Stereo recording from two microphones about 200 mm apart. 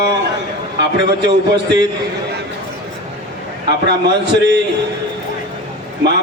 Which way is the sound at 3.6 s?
55° right (ahead or behind).